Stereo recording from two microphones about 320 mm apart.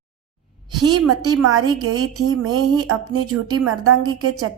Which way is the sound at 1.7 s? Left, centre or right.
Right.